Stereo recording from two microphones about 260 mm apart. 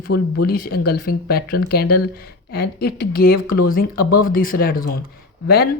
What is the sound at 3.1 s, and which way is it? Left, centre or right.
Speech, left.